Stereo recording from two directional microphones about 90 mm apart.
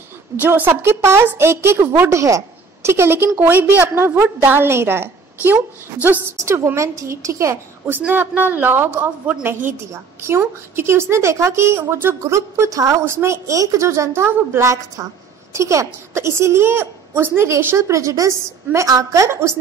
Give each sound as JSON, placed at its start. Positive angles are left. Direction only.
{"t": 0.4, "sound": "a woman's voice", "side_deg": -20}
{"t": 8.1, "sound": "a woman's voice", "side_deg": -20}
{"t": 10.8, "sound": "a woman's voice", "side_deg": -30}